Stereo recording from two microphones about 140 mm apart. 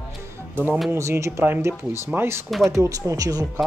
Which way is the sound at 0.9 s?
20° right (ahead or behind).